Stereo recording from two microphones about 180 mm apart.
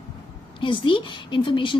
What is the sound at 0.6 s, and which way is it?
A woman's voice, 25° left (ahead or behind).